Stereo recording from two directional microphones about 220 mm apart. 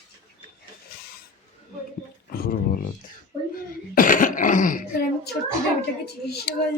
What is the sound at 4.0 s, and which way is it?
Throat clearing, 35° left (ahead or behind).